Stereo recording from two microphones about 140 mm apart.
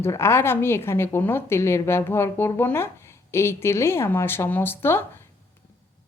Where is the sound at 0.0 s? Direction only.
20° left (ahead or behind).